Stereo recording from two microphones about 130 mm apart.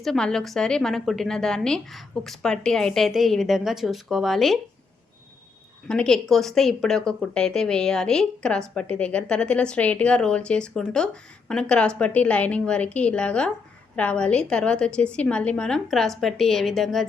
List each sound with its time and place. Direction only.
0.0 s a woman's voice: 5° left (ahead or behind)
5.9 s speech: 5° left (ahead or behind)